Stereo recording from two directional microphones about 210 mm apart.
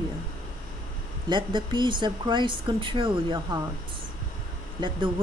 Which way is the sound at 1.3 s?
20° right (ahead or behind).